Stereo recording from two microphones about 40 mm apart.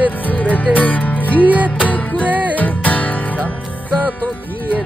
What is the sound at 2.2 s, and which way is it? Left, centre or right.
Music, right.